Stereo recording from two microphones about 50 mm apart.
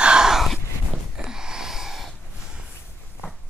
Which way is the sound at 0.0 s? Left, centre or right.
Centre.